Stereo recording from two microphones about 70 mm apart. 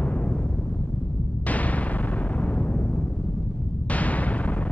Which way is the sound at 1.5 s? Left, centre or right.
Left.